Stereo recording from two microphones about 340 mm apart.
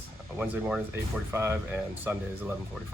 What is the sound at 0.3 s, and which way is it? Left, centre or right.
Speech, centre.